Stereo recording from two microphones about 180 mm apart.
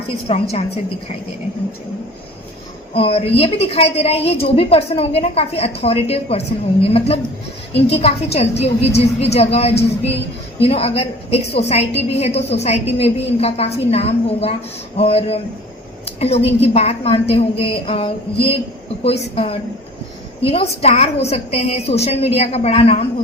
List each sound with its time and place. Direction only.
0.3 s a woman's voice: 35° left (ahead or behind)
2.9 s a woman's voice: 35° left (ahead or behind)